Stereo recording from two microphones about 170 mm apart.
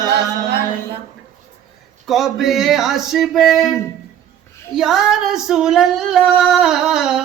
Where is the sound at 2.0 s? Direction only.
Centre (ahead or behind).